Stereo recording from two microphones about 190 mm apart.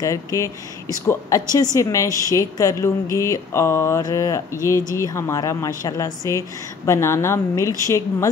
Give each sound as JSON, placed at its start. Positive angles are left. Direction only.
{"t": 0.0, "sound": "speech", "side_deg": 15}